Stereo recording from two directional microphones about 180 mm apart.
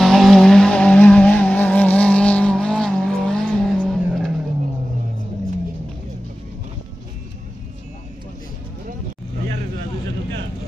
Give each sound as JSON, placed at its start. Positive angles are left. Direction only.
{"t": 0.0, "sound": "vehicle", "side_deg": 0}